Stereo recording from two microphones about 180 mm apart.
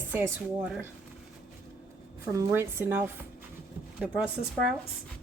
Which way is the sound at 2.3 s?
15° right (ahead or behind).